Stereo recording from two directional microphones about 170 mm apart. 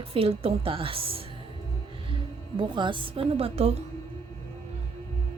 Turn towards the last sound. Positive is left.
turn(degrees=-35)  # may be behind; listen again after turning